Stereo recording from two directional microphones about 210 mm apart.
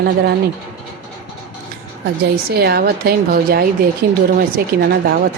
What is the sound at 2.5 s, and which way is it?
A woman's voice, 50° right (ahead or behind).